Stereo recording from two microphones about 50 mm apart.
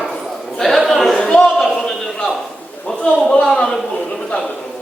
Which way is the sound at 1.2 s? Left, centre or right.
Centre.